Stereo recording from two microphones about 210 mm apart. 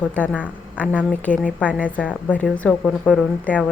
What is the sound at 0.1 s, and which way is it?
A woman's voice, 5° left (ahead or behind).